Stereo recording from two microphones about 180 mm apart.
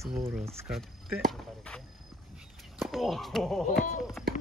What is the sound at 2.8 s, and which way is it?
Speech, centre (ahead or behind).